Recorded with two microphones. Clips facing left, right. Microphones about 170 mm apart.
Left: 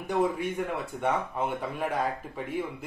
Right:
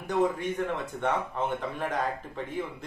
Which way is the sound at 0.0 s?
10° left (ahead or behind).